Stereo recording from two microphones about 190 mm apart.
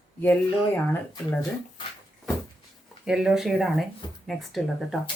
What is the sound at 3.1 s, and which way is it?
Speech, 5° right (ahead or behind).